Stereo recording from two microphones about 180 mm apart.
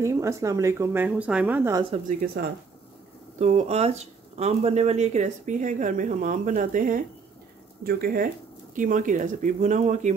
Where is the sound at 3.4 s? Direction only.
40° right (ahead or behind).